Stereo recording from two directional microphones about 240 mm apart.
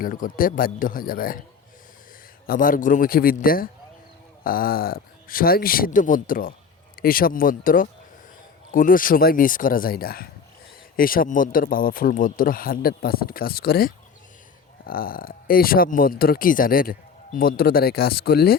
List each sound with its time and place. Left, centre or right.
0.0 s speech: left
2.5 s speech: left